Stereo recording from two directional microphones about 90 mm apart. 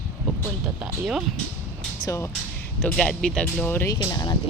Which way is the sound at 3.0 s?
10° left (ahead or behind).